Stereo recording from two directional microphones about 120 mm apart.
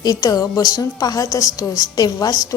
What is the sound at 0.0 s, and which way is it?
A woman's voice, 30° left (ahead or behind).